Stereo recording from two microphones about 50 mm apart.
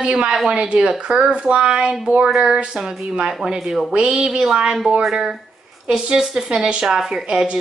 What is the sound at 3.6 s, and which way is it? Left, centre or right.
Speech, centre.